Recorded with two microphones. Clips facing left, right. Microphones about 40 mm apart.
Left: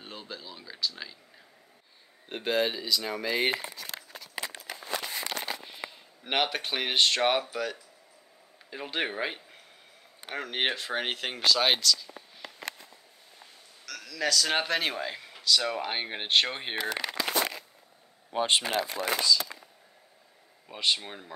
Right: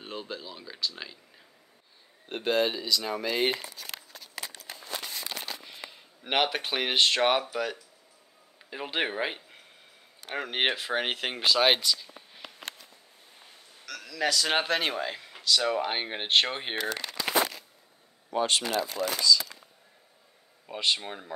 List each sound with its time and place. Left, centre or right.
0.0 s speech: centre
2.2 s speech: centre
4.1 s crumpling: left
5.1 s a sound: left
6.2 s speech: centre
8.6 s speech: centre
13.8 s speech: centre
17.1 s a sound: left
18.3 s speech: centre
18.7 s speech: left
20.6 s speech: centre